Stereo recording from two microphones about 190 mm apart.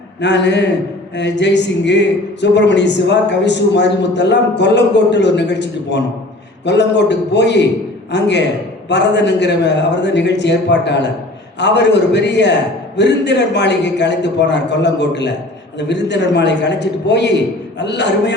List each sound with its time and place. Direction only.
0.2 s a man's voice: 70° left (ahead or behind)